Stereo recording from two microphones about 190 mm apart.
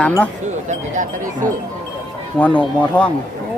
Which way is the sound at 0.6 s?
40° right (ahead or behind).